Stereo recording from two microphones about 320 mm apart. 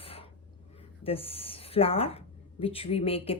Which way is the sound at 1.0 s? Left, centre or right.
Centre.